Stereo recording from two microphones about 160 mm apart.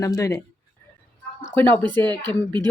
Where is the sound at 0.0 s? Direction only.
20° left (ahead or behind).